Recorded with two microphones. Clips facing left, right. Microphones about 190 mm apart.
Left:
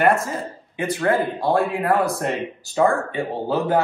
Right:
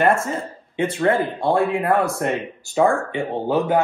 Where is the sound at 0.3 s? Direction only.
25° right (ahead or behind).